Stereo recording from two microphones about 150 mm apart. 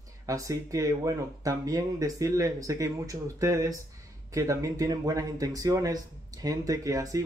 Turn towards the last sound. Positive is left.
turn(degrees=-20)  # may be behind; listen again after turning